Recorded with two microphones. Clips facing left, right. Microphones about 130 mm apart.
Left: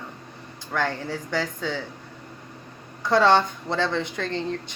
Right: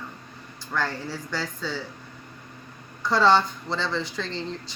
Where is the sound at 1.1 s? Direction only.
55° left (ahead or behind).